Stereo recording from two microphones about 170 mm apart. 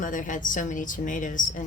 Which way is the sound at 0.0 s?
50° left (ahead or behind).